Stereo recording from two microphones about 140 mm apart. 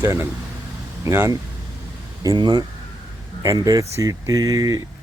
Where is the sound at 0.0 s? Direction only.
15° right (ahead or behind).